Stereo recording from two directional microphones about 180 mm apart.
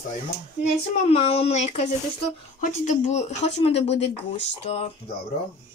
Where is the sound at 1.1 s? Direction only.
35° left (ahead or behind).